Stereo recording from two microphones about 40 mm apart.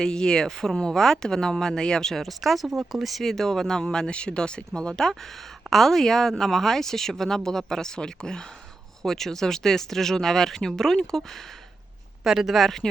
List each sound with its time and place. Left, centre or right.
0.0 s speech: centre
4.0 s speech: left
5.7 s speech: centre
12.2 s speech: centre